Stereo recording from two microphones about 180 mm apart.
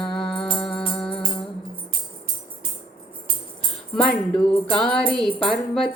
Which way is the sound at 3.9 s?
5° left (ahead or behind).